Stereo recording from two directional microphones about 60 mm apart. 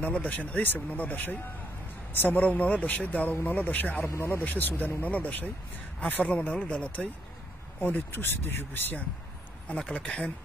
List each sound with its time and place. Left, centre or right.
0.0 s speech: left
7.8 s speech: left
9.9 s speech: centre